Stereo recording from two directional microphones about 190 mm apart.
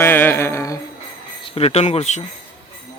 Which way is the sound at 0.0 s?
10° left (ahead or behind).